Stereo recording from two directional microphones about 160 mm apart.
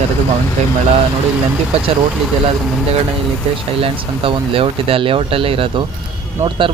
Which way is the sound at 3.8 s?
35° right (ahead or behind).